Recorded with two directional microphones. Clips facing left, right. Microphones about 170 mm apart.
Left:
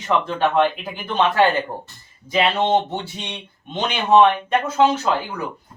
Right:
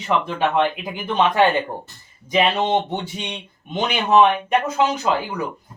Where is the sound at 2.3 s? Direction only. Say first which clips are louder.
Even; 15° right (ahead or behind).